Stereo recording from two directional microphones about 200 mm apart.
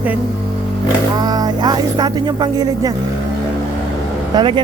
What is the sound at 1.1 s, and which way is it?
Speech, 20° right (ahead or behind).